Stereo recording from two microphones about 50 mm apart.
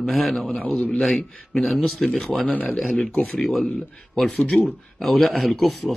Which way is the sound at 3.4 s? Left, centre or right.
Centre.